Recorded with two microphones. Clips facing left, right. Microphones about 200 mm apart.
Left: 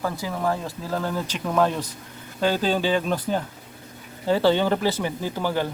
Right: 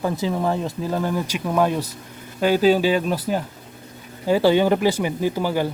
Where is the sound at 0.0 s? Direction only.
20° right (ahead or behind).